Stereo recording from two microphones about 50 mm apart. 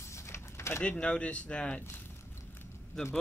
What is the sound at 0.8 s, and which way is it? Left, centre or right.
Speech, left.